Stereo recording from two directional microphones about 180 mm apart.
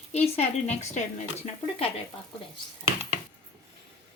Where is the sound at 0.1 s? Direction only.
35° left (ahead or behind).